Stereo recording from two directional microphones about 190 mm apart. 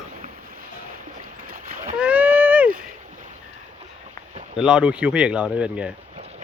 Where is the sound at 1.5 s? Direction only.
45° right (ahead or behind).